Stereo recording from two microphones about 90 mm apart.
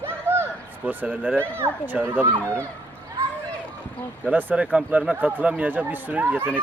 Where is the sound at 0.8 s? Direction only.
20° right (ahead or behind).